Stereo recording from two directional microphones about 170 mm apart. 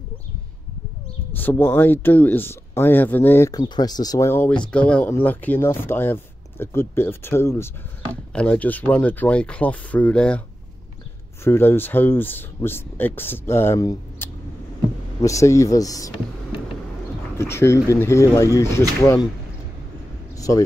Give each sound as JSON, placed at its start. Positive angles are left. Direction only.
{"t": 1.3, "sound": "speech", "side_deg": 10}
{"t": 11.4, "sound": "speech", "side_deg": 15}
{"t": 17.4, "sound": "speech", "side_deg": 15}
{"t": 20.3, "sound": "a man's voice", "side_deg": 20}